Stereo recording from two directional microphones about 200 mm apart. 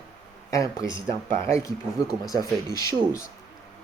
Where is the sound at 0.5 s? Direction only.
15° left (ahead or behind).